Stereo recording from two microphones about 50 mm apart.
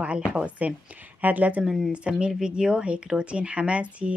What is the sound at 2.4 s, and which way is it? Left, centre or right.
Speech, centre.